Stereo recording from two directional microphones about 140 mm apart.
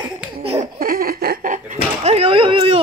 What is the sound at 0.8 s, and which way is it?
Speech, 90° right.